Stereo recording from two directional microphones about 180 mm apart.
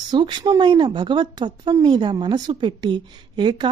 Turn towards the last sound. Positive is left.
turn(degrees=-25)  # may be behind; listen again after turning